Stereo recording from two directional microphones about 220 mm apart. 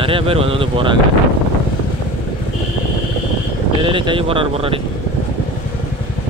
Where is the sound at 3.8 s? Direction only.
20° right (ahead or behind).